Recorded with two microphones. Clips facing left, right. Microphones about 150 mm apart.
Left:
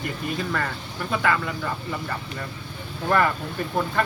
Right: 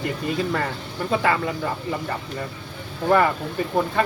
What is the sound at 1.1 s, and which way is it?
Speech, 25° right (ahead or behind).